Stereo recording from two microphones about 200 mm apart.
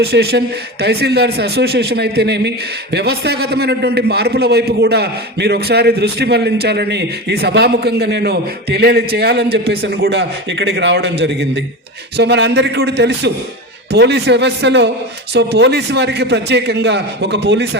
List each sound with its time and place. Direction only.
0.0 s a man's voice: 55° right (ahead or behind)